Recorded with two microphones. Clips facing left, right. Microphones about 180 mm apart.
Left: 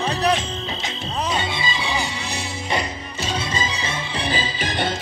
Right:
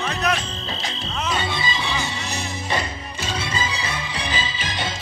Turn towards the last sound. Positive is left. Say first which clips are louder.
# left 4 dB
turn(degrees=45)  # may be behind; listen again after turning